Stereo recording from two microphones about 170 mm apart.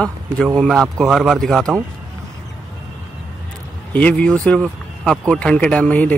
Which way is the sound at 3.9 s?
10° left (ahead or behind).